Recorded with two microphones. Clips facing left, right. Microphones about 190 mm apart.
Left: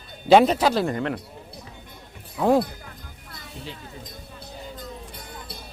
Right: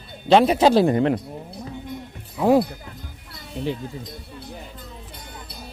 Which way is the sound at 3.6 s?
60° right (ahead or behind).